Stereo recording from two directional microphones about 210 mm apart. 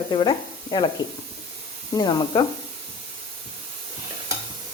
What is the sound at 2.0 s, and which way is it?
Speech, 20° left (ahead or behind).